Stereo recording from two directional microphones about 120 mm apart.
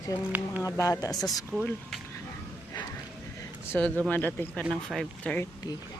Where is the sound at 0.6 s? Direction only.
25° left (ahead or behind).